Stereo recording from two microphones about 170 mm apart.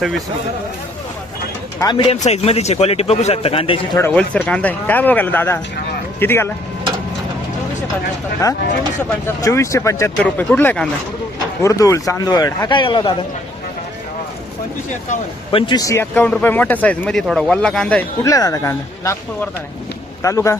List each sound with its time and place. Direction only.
1.8 s speech: 25° left (ahead or behind)
2.1 s a man's voice: 40° left (ahead or behind)
3.9 s speech: 10° left (ahead or behind)
8.4 s speech: 20° left (ahead or behind)
15.5 s speech: 25° left (ahead or behind); by 18.0 s 5° left (ahead or behind)
18.2 s speech: 20° left (ahead or behind)